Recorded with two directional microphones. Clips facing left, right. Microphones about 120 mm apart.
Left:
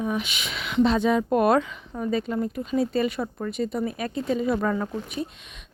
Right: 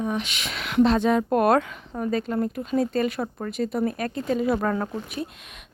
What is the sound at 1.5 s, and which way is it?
Speech, 50° right (ahead or behind).